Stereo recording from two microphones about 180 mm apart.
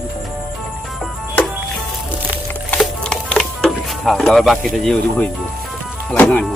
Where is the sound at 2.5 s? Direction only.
5° left (ahead or behind).